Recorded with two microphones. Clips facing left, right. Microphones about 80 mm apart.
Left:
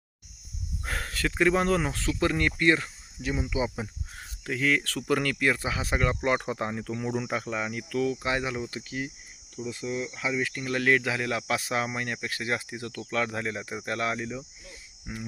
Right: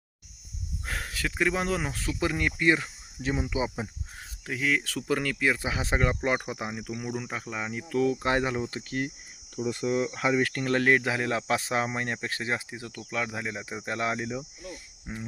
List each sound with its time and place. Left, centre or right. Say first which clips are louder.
0.9 s speech: left 2 dB; centre
3.2 s speech: even; right
4.4 s speech: left 2 dB; centre
5.6 s speech: even; right
6.3 s speech: left 2 dB; centre
7.7 s speech: right 5 dB; right
8.2 s speech: right 3 dB; right
8.9 s speech: right 3 dB; right
10.8 s speech: left 2 dB; right
12.5 s speech: left 1 dB; centre
14.1 s speech: right 1 dB; right